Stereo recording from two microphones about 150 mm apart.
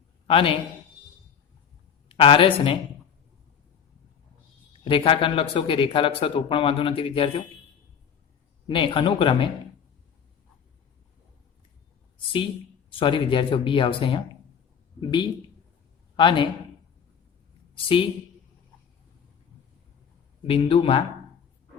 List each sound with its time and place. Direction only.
0.3 s speech: 35° left (ahead or behind)
2.0 s speech: 35° left (ahead or behind)
4.8 s speech: 35° left (ahead or behind)
8.6 s speech: 35° left (ahead or behind)
13.0 s speech: 35° left (ahead or behind)
20.5 s speech: 40° left (ahead or behind)